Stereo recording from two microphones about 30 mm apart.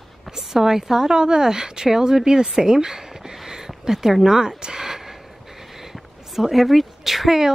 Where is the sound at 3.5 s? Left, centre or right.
Centre.